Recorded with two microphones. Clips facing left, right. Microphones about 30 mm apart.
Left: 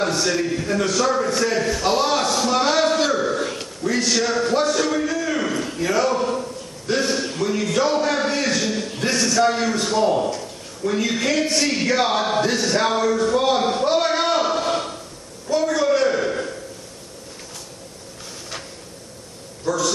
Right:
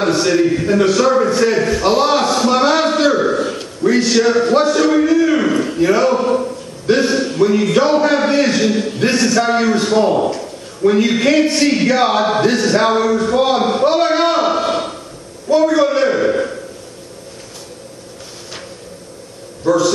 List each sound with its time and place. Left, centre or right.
0.0 s a man's voice: right
15.5 s a sound: right
19.6 s a man's voice: right